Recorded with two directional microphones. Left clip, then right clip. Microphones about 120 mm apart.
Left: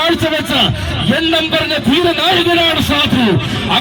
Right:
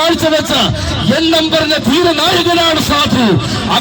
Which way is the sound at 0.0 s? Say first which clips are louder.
Right 3 dB; 35° right (ahead or behind).